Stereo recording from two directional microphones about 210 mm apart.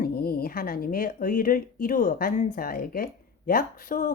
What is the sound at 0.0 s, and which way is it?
Speech, 45° left (ahead or behind).